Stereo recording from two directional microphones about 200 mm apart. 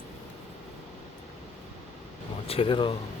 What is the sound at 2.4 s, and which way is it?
Speech, 30° left (ahead or behind).